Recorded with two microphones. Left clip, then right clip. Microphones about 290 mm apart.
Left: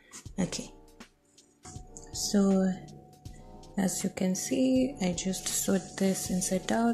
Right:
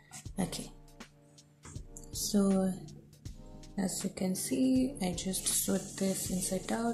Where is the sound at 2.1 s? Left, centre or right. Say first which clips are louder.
Left 3 dB; centre.